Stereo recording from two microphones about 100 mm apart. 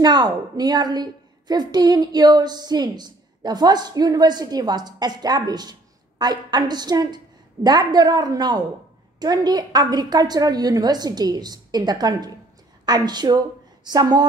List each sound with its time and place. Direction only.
0.0 s a woman's voice: 45° right (ahead or behind)